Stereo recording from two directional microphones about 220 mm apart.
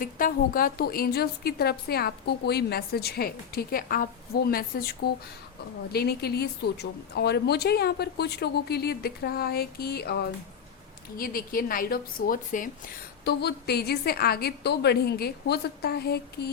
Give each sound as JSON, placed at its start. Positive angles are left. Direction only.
{"t": 0.0, "sound": "a woman's voice", "side_deg": 40}